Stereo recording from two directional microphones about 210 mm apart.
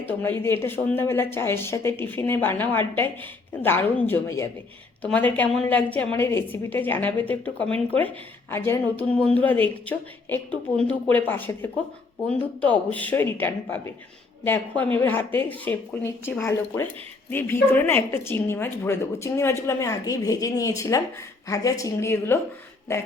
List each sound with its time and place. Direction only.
0.0 s a woman's voice: 10° left (ahead or behind)